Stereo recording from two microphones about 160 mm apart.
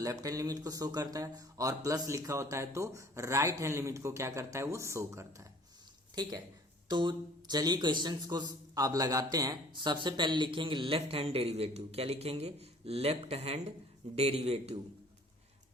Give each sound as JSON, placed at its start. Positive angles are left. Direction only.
{"t": 0.0, "sound": "a man's voice", "side_deg": -20}
{"t": 6.8, "sound": "a man's voice", "side_deg": -30}